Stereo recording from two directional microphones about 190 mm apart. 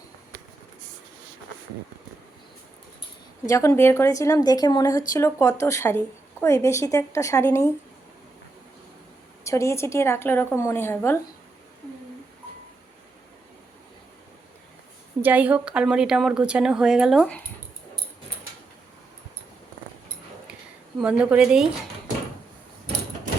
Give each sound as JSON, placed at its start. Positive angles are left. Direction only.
{"t": 3.5, "sound": "speech", "side_deg": 15}
{"t": 9.4, "sound": "speech", "side_deg": 15}
{"t": 15.2, "sound": "speech", "side_deg": -10}
{"t": 21.0, "sound": "speech", "side_deg": -5}